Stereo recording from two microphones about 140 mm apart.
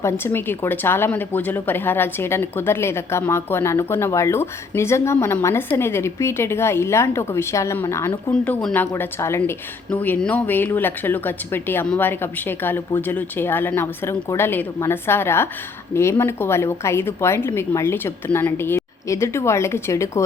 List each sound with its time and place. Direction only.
0.0 s a woman's voice: 15° left (ahead or behind)